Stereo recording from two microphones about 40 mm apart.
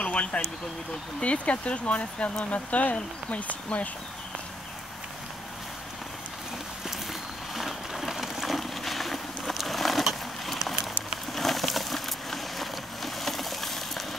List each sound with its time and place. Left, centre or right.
0.0 s vehicle: left
1.2 s speech: left
7.1 s a sound: centre